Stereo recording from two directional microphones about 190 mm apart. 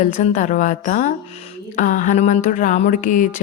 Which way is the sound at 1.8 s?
40° left (ahead or behind).